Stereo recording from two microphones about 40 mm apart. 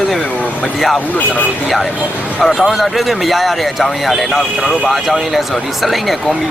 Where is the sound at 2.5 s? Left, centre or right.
Centre.